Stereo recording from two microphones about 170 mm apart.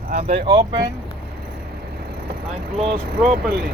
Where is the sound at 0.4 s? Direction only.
25° right (ahead or behind).